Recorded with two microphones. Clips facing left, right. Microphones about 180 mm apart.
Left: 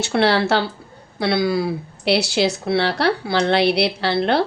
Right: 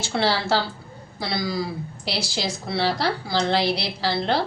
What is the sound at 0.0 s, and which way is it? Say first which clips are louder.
A woman's voice: left 6 dB; 65° left (ahead or behind).